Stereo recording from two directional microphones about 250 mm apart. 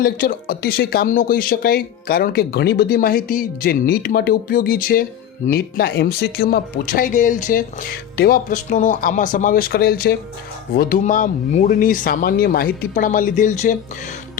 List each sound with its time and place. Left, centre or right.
0.0 s speech: left